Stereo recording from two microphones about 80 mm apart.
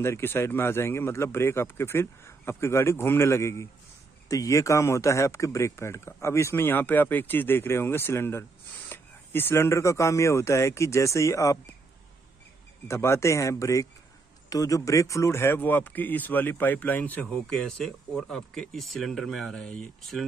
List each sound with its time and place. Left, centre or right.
0.0 s speech: left
12.8 s speech: left
17.5 s speech: centre